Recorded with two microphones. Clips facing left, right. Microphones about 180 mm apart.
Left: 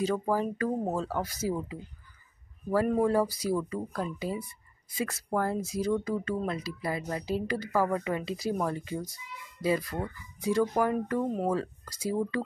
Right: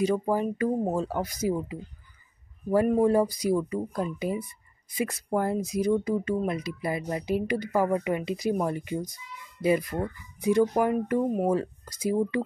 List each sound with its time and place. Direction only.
0.0 s speech: 15° right (ahead or behind)
3.0 s speech: 20° right (ahead or behind)